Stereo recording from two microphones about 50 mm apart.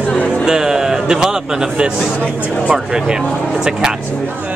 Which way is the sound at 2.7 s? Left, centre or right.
Centre.